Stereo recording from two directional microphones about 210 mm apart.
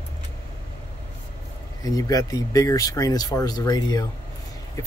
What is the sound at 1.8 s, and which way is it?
Speech, 15° left (ahead or behind).